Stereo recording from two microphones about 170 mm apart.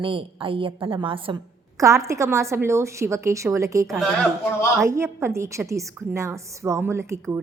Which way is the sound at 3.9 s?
Centre (ahead or behind).